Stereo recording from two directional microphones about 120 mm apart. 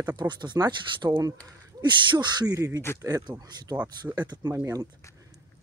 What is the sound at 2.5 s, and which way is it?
Speech, 25° right (ahead or behind).